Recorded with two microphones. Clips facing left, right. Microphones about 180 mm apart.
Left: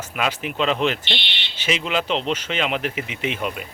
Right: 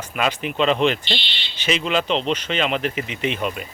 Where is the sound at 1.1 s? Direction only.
65° left (ahead or behind).